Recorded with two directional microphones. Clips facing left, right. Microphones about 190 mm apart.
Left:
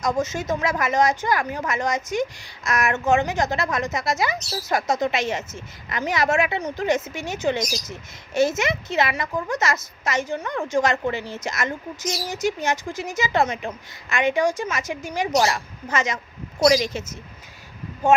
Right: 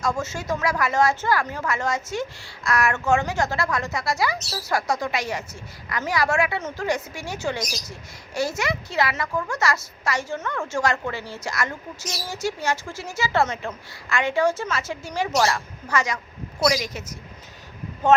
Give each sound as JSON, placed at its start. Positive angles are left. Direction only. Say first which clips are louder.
{"t": 0.0, "sound": "a woman's voice", "louder": "left 3 dB", "side_deg": 20}
{"t": 18.0, "sound": "speech", "louder": "even", "side_deg": 10}